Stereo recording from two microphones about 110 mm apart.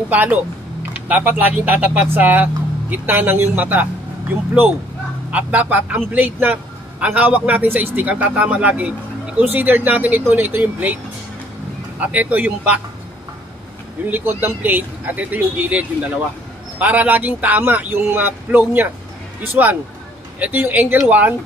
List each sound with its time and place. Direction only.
0.1 s a man's voice: 15° right (ahead or behind)
5.3 s a man's voice: 15° right (ahead or behind)
12.0 s a man's voice: 15° right (ahead or behind)
14.0 s a man's voice: 20° right (ahead or behind)